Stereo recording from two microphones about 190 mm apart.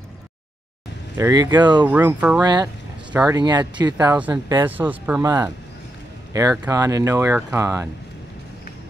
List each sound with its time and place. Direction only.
1.1 s speech: 15° right (ahead or behind)
1.9 s speech: 10° right (ahead or behind)
2.4 s speech: 20° right (ahead or behind)
3.1 s speech: 10° right (ahead or behind)
3.3 s speech: 20° right (ahead or behind)
4.6 s speech: 10° right (ahead or behind)
6.3 s speech: 20° right (ahead or behind)